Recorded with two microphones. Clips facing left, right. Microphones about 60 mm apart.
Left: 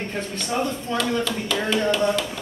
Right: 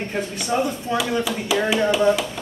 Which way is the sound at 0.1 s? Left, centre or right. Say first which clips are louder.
Right 6 dB; centre.